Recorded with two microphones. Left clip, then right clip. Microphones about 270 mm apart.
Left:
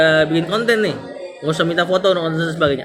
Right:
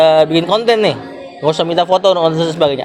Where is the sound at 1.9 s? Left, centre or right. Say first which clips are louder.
Right 7 dB; right.